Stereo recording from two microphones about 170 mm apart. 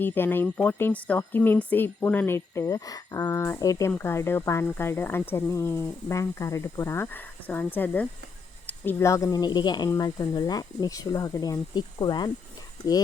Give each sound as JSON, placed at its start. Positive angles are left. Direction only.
{"t": 0.0, "sound": "speech", "side_deg": 10}